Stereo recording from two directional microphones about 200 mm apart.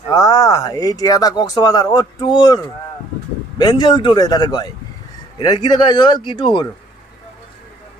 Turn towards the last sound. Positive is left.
turn(degrees=20)  # may be behind; listen again after turning